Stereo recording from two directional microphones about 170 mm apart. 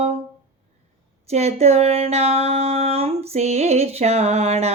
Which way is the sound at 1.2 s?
40° right (ahead or behind).